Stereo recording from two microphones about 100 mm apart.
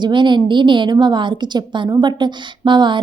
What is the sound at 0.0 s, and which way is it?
A woman's voice, 50° right (ahead or behind).